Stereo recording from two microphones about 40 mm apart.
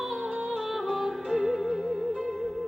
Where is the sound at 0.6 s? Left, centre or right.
Centre.